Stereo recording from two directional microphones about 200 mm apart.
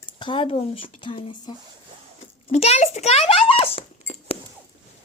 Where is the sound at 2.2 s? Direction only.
30° left (ahead or behind).